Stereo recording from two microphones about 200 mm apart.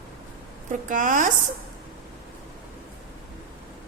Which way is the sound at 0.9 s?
40° right (ahead or behind).